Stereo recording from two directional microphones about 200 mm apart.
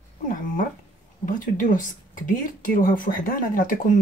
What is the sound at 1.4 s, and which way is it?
Speech, 40° left (ahead or behind).